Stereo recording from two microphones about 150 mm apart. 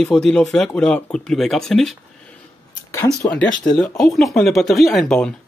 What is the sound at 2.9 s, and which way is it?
Speech, 15° left (ahead or behind).